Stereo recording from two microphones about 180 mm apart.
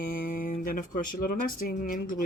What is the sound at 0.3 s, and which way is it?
Speech, 50° left (ahead or behind).